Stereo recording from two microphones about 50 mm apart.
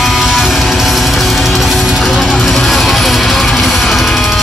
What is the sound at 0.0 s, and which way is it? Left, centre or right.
Music, centre.